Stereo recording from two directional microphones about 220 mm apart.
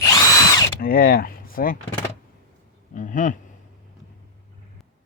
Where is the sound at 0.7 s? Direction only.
40° left (ahead or behind).